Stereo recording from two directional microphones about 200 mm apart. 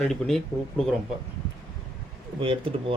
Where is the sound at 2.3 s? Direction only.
25° right (ahead or behind).